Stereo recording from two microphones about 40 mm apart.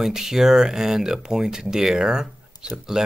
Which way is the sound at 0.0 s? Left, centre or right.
Centre.